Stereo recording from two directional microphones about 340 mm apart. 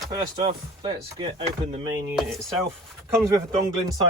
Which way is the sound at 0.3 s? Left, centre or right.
Centre.